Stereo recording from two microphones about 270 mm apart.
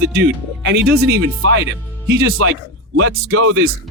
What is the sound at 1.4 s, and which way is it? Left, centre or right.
Speech, right.